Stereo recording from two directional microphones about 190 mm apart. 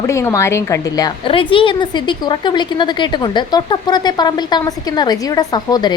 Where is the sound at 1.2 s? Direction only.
25° left (ahead or behind).